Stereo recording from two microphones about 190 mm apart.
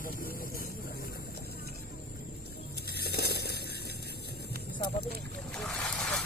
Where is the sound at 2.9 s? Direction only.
55° left (ahead or behind).